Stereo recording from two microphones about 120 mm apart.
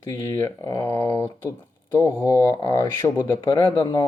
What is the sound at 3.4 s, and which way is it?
Speech, 40° left (ahead or behind).